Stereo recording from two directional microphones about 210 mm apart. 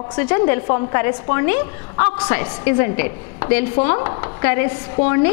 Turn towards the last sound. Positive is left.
turn(degrees=15)  # may be behind; listen again after turning